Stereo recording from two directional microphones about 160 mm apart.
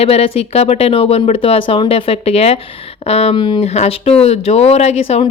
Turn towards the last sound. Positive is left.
turn(degrees=40)  # may be behind; listen again after turning